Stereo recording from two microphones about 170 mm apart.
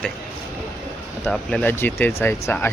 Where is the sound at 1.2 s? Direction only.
5° left (ahead or behind).